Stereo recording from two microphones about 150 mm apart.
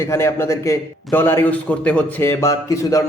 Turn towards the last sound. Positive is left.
turn(degrees=20)  # may be behind; listen again after turning